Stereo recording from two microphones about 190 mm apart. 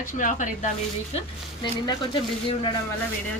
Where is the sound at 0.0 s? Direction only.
40° left (ahead or behind).